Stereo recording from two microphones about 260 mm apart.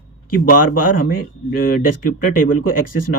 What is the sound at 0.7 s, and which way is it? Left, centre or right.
Speech, left.